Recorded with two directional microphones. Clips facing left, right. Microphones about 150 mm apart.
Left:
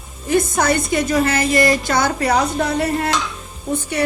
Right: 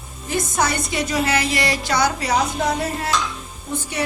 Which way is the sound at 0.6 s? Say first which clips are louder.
Left 4 dB; 50° left (ahead or behind).